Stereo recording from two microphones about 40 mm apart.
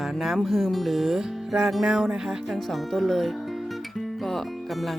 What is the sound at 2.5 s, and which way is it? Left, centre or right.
Speech, centre.